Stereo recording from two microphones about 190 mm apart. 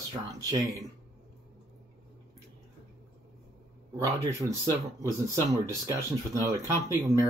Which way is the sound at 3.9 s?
15° right (ahead or behind).